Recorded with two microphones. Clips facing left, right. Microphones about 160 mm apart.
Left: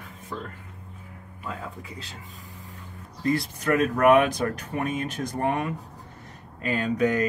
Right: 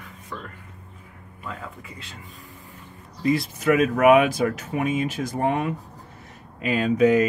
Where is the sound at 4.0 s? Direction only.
10° right (ahead or behind).